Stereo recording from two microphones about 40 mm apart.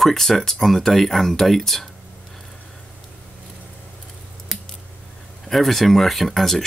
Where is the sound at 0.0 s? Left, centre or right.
Centre.